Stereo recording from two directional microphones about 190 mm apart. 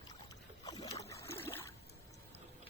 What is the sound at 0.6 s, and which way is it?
Boat, 20° left (ahead or behind).